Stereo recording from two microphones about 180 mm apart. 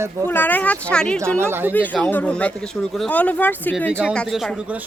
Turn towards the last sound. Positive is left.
turn(degrees=0)  # may be behind; listen again after turning